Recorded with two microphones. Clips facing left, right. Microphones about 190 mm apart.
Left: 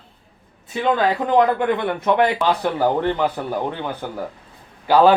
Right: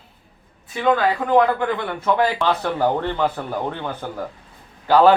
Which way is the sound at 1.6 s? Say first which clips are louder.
Left 3 dB; 20° left (ahead or behind).